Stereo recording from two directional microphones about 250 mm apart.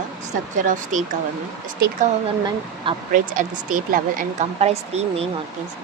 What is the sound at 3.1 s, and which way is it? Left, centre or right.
Speech, right.